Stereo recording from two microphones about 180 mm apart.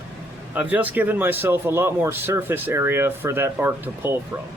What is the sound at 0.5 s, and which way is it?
A man's voice, 10° right (ahead or behind).